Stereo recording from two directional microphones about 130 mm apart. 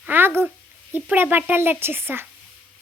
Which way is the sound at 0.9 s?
15° right (ahead or behind).